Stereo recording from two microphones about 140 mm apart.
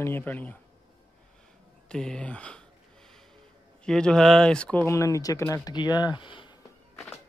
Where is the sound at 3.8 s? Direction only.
5° left (ahead or behind).